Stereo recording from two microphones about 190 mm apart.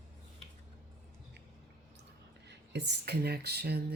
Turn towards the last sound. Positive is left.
turn(degrees=-60)  # may be behind; listen again after turning